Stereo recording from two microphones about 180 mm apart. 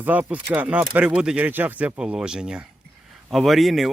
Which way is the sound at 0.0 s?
10° right (ahead or behind).